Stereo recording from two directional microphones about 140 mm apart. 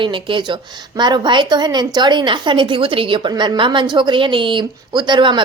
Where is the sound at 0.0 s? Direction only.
35° right (ahead or behind).